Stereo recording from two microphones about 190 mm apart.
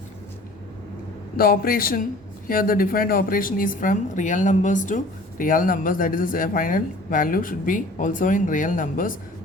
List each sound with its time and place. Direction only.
1.4 s speech: 50° left (ahead or behind)